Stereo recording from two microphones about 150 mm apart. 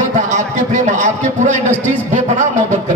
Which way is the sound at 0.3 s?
55° right (ahead or behind).